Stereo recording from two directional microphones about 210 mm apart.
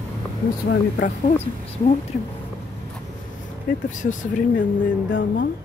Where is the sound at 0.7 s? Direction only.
55° left (ahead or behind).